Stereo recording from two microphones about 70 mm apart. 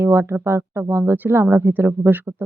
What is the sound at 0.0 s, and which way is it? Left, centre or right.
Speech, right.